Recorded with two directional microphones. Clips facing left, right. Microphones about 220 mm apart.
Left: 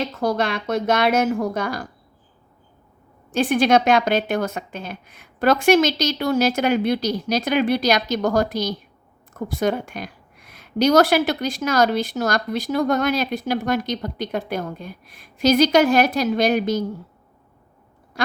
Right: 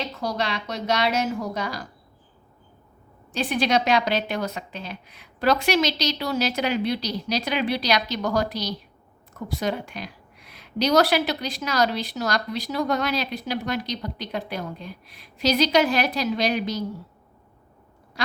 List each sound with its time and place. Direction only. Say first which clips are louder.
0.0 s a woman's voice: left 6 dB; 50° left (ahead or behind)
3.3 s a woman's voice: left 6 dB; 50° left (ahead or behind)